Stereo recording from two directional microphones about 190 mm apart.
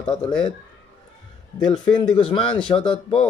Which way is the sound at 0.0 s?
25° left (ahead or behind).